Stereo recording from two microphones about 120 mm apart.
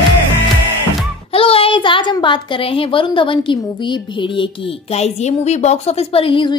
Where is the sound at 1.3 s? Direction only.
50° left (ahead or behind).